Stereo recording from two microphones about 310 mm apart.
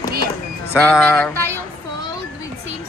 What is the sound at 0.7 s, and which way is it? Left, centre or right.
Speech, centre.